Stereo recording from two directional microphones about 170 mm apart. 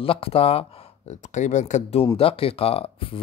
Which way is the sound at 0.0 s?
35° left (ahead or behind).